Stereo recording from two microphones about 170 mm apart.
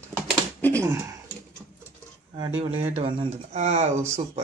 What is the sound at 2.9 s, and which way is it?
Speech, 40° right (ahead or behind).